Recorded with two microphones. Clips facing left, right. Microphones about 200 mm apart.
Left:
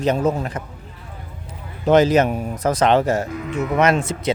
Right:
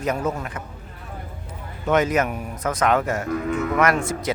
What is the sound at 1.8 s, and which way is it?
Speech, 30° left (ahead or behind).